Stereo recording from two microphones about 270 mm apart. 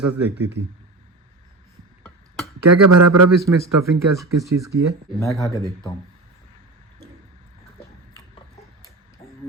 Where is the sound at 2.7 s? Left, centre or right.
Right.